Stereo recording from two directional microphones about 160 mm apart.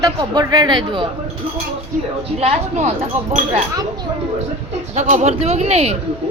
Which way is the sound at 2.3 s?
40° right (ahead or behind).